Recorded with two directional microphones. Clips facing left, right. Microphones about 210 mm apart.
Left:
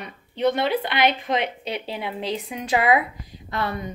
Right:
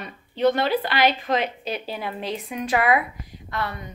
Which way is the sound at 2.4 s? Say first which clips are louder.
Even; 20° left (ahead or behind).